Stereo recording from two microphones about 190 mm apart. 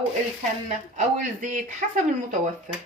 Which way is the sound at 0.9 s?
40° right (ahead or behind).